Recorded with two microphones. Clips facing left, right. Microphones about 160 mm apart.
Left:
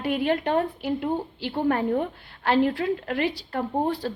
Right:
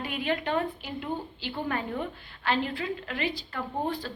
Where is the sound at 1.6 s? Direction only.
50° left (ahead or behind).